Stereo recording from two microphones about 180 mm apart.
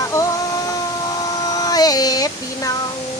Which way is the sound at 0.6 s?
20° left (ahead or behind).